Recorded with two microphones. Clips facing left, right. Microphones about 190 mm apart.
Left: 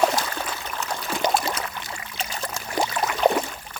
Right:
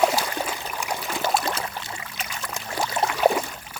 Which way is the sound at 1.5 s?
25° right (ahead or behind).